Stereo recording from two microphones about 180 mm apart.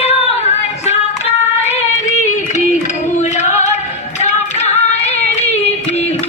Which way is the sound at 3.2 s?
40° left (ahead or behind).